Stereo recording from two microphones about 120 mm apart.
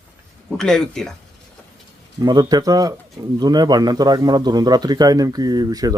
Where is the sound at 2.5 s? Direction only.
30° right (ahead or behind).